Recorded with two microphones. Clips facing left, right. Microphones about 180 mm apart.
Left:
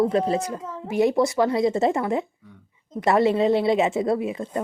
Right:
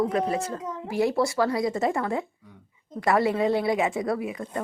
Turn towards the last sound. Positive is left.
turn(degrees=25)  # may be behind; listen again after turning